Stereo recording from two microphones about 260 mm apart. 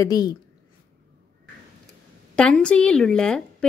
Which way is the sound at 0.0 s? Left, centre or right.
Centre.